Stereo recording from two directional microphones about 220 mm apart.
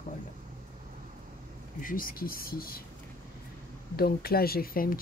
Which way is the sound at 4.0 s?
45° left (ahead or behind).